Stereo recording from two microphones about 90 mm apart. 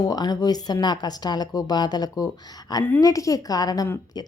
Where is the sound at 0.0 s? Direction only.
45° left (ahead or behind).